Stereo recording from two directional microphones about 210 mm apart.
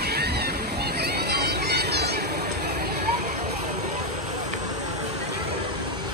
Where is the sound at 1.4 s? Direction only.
50° right (ahead or behind).